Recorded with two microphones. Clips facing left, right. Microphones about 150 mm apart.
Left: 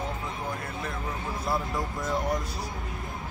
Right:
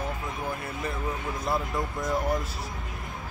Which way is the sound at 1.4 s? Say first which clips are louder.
Right 1 dB; centre (ahead or behind).